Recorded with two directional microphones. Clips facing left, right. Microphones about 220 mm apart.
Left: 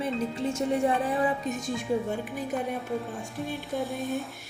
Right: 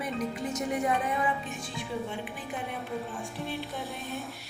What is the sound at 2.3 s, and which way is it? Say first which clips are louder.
Speech: left 7 dB; 40° left (ahead or behind).